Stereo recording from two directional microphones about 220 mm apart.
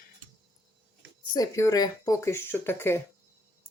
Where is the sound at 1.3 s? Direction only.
15° left (ahead or behind).